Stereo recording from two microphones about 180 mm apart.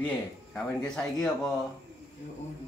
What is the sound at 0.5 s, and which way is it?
Speech, 5° left (ahead or behind).